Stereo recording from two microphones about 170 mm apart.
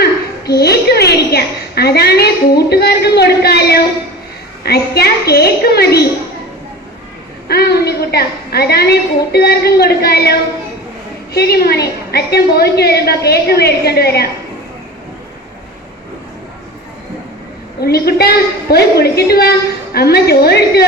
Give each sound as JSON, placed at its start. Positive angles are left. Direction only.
{"t": 0.0, "sound": "a sound", "side_deg": 70}
{"t": 2.6, "sound": "a woman's voice", "side_deg": 70}
{"t": 7.4, "sound": "a woman's voice", "side_deg": 70}
{"t": 17.7, "sound": "a woman's voice", "side_deg": 70}